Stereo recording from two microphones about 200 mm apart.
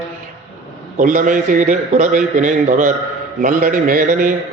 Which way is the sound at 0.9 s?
40° right (ahead or behind).